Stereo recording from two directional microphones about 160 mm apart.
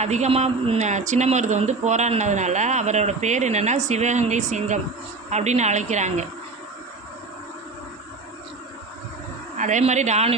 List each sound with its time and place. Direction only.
0.0 s speech: 45° right (ahead or behind)
9.6 s speech: 50° right (ahead or behind)